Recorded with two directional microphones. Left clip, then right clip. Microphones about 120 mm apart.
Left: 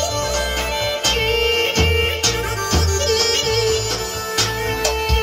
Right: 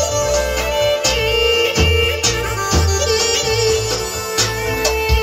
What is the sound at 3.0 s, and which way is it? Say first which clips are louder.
Music: right 1 dB; 20° left (ahead or behind).